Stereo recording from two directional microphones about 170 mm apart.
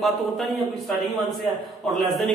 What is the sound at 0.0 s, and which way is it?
A man's voice, centre (ahead or behind).